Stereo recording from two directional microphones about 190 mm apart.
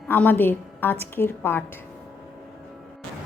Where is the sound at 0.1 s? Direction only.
10° left (ahead or behind).